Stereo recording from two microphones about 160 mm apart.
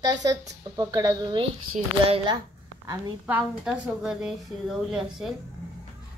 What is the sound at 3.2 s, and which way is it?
A woman's voice, 5° right (ahead or behind).